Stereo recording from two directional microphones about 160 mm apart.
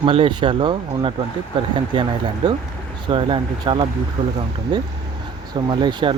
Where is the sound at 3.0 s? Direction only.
30° right (ahead or behind).